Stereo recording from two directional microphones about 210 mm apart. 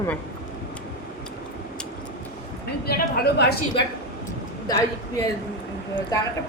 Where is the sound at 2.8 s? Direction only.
45° left (ahead or behind).